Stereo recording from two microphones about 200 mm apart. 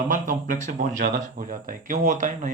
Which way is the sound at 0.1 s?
40° right (ahead or behind).